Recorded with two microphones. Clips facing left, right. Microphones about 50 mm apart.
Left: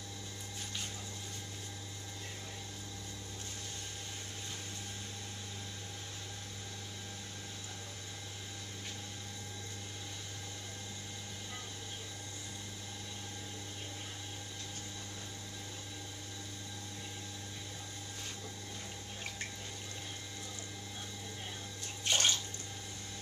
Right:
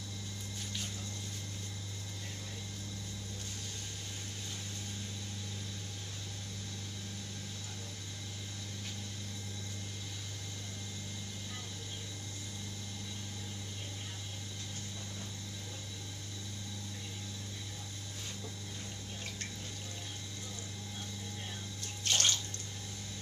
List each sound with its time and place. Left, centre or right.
22.0 s bathtub: centre